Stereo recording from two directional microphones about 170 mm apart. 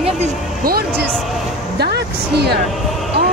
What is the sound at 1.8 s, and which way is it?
Music, 75° right (ahead or behind).